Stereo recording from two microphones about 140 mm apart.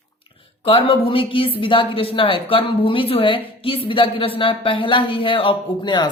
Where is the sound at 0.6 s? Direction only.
40° left (ahead or behind).